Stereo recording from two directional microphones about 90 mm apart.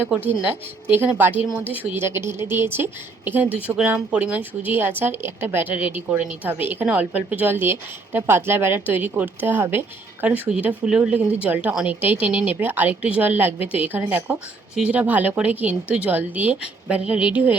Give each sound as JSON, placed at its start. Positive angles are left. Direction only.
{"t": 0.4, "sound": "a woman's voice", "side_deg": -20}